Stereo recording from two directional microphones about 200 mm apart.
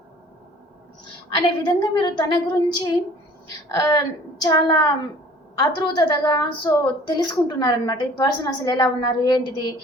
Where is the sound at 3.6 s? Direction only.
15° left (ahead or behind).